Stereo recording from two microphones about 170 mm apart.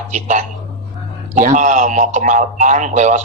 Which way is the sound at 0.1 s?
45° right (ahead or behind).